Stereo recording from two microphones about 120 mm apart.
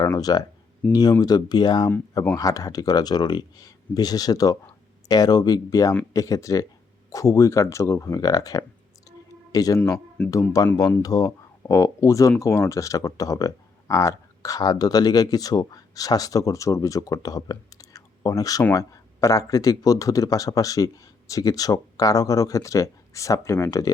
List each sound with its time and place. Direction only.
0.2 s speech: 35° left (ahead or behind)
0.8 s speech: 10° left (ahead or behind)
1.2 s speech: 35° left (ahead or behind)
9.0 s clicking: 30° left (ahead or behind)
10.3 s speech: 30° left (ahead or behind)